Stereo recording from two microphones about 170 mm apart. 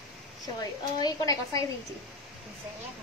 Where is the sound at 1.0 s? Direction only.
20° left (ahead or behind).